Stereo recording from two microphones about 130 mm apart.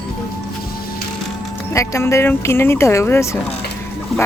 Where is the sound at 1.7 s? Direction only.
25° left (ahead or behind).